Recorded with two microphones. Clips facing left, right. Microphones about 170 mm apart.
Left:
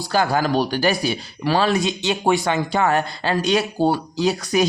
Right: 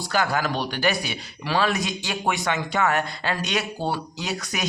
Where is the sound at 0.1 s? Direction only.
30° left (ahead or behind).